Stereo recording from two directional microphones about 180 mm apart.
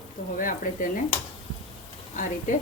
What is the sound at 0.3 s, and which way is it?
Speech, 50° left (ahead or behind).